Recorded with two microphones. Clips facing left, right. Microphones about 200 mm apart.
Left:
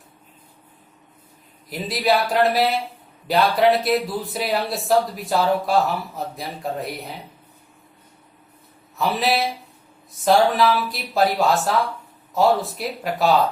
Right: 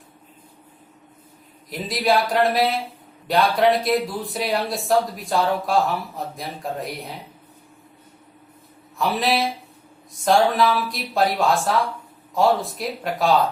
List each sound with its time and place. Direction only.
1.7 s speech: centre (ahead or behind)
9.0 s speech: centre (ahead or behind)